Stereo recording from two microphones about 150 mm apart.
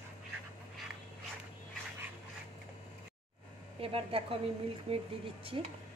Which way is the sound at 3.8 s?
40° right (ahead or behind).